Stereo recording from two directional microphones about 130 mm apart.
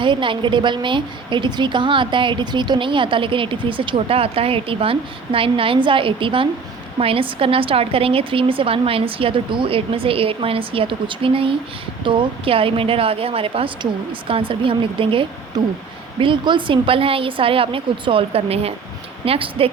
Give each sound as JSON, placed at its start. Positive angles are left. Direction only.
{"t": 0.0, "sound": "a woman's voice", "side_deg": -40}